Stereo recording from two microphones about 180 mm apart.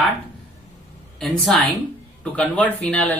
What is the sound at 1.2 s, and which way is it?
Speech, centre (ahead or behind).